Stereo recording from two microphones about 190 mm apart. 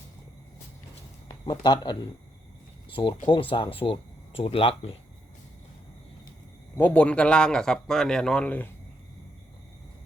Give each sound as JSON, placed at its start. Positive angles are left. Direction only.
{"t": 1.3, "sound": "speech", "side_deg": 20}
{"t": 6.7, "sound": "a man's voice", "side_deg": 10}